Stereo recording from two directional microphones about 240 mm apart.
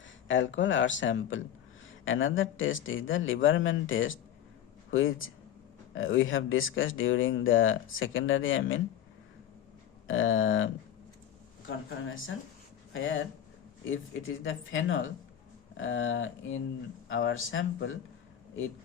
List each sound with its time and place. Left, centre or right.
0.3 s speech: left
10.1 s speech: left
12.0 s speech: left